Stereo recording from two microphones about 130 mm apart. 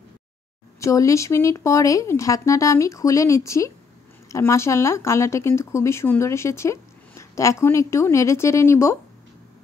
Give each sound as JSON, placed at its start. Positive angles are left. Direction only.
{"t": 0.7, "sound": "speech", "side_deg": 25}